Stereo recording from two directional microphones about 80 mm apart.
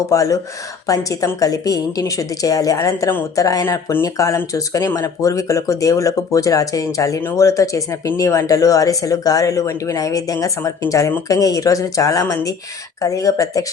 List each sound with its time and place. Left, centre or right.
0.1 s speech: left